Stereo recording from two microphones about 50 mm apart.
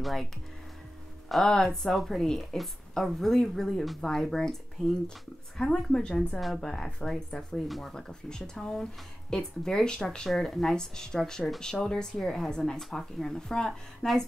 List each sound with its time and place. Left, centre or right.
0.0 s a woman's voice: centre
1.4 s a woman's voice: centre
7.8 s speech: centre